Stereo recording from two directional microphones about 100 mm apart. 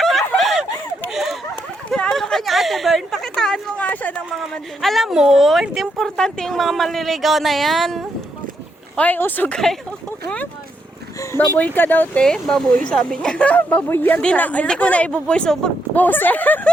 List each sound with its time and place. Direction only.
0.0 s a sound: centre (ahead or behind)
4.5 s a woman's voice: centre (ahead or behind)
9.0 s speech: 20° left (ahead or behind)
10.2 s vehicle: 15° left (ahead or behind)
11.3 s speech: 15° left (ahead or behind)
12.2 s speech: 5° left (ahead or behind)